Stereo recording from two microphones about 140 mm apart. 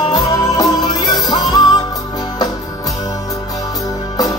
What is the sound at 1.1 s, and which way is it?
Music, centre (ahead or behind).